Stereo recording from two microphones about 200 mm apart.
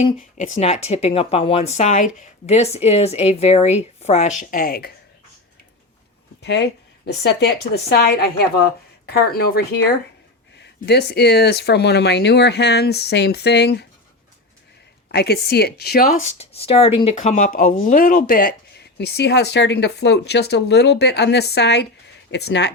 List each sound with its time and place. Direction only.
0.3 s speech: 35° left (ahead or behind)
6.4 s a woman's voice: 60° left (ahead or behind)
15.1 s a woman's voice: 55° left (ahead or behind)
16.2 s speech: 30° left (ahead or behind); by 22.7 s 55° left (ahead or behind)